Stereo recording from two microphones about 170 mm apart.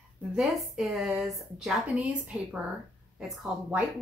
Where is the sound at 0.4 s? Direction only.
Centre (ahead or behind).